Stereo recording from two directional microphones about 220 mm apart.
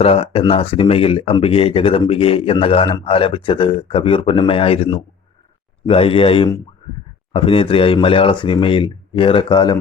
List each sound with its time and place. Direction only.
0.0 s speech: 25° left (ahead or behind)